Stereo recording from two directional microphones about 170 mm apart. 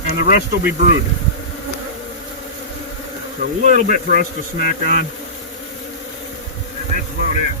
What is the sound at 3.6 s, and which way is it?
Speech, 45° right (ahead or behind).